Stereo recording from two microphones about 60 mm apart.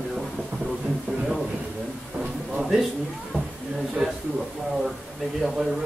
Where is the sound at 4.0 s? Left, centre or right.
Centre.